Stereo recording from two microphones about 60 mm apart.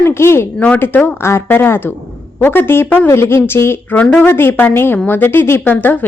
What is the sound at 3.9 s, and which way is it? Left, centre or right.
A woman's voice, left.